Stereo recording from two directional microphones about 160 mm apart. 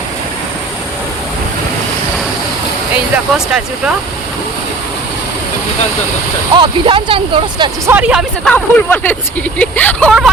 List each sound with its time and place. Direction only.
2.9 s speech: 5° right (ahead or behind)
6.6 s speech: 35° right (ahead or behind)
7.9 s speech: 10° right (ahead or behind)
8.4 s speech: 10° left (ahead or behind)
10.1 s speech: centre (ahead or behind)